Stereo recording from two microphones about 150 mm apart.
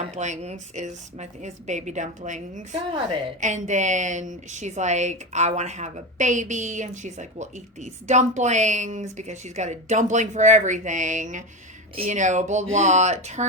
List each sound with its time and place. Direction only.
0.1 s a woman's voice: 50° right (ahead or behind)